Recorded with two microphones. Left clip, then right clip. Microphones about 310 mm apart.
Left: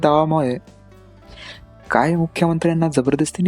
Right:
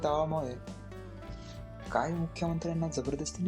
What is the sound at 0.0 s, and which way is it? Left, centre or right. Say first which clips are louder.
Speech: left 14 dB; left.